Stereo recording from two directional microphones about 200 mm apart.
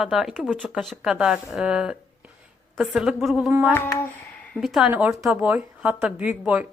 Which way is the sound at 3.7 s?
10° left (ahead or behind).